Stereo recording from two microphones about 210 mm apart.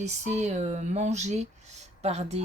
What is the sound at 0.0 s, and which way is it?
Speech, 35° right (ahead or behind).